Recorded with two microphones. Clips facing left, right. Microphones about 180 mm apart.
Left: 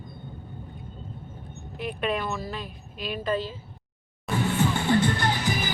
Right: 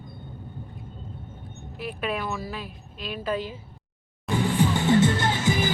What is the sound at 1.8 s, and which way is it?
Speech, 5° right (ahead or behind).